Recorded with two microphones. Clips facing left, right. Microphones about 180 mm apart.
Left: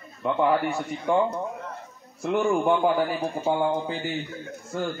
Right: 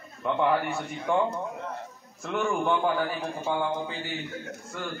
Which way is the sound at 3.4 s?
35° left (ahead or behind).